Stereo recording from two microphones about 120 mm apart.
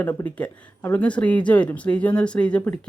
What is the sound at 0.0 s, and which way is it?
Speech, 15° left (ahead or behind).